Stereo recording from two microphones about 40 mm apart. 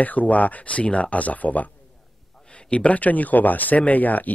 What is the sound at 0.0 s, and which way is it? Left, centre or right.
Speech, left.